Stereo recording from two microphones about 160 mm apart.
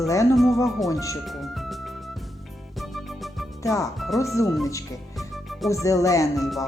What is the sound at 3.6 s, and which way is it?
Speech, 20° left (ahead or behind).